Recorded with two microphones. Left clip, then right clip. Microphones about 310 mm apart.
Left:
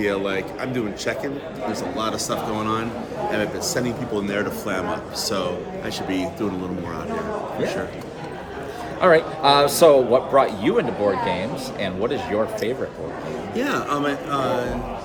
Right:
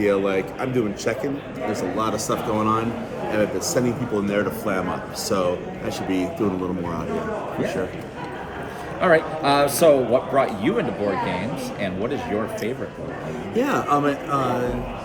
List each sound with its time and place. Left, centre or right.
0.0 s speech: centre
9.0 s a man's voice: centre
13.5 s speech: centre